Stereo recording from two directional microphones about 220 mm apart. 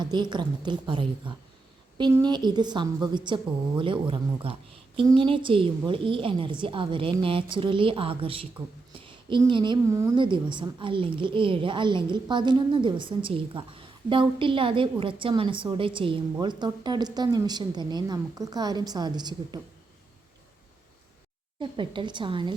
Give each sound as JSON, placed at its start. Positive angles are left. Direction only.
{"t": 0.0, "sound": "a woman's voice", "side_deg": -20}
{"t": 21.6, "sound": "a woman's voice", "side_deg": -20}